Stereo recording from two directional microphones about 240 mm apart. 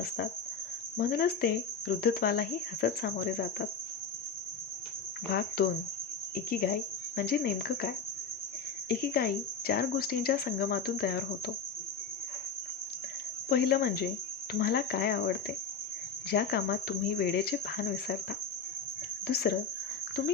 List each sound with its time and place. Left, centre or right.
0.9 s speech: left
5.3 s speech: left
8.9 s speech: left
13.5 s speech: left
19.3 s speech: left